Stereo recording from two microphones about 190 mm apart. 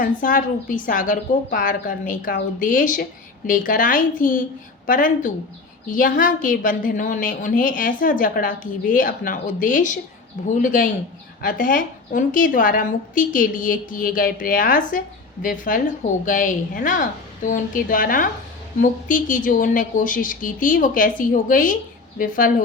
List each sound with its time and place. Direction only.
0.0 s a woman's voice: 45° left (ahead or behind)